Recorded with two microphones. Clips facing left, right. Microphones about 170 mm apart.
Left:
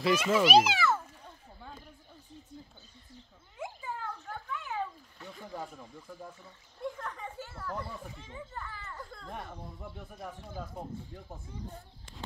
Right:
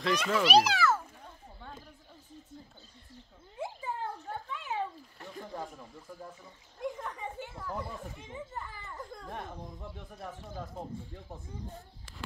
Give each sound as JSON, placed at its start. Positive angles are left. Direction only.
{"t": 0.0, "sound": "a child's voice", "side_deg": 5}
{"t": 3.5, "sound": "a sound", "side_deg": -30}
{"t": 7.0, "sound": "children playing", "side_deg": -15}
{"t": 9.3, "sound": "speech", "side_deg": 5}